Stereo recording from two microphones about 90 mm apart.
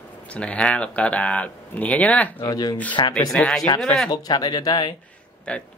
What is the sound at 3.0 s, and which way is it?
Speech, 60° left (ahead or behind).